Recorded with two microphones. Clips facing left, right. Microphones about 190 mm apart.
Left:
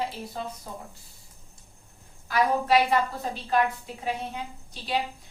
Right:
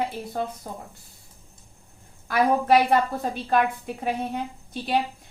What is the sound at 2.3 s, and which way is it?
A woman's voice, 55° right (ahead or behind).